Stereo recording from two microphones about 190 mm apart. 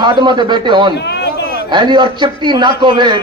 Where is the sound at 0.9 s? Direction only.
60° left (ahead or behind).